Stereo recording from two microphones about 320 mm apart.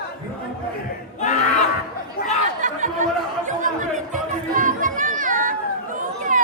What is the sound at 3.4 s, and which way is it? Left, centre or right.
Speech, right.